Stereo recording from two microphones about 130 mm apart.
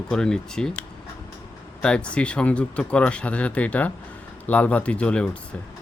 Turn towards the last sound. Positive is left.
turn(degrees=10)  # may be behind; listen again after turning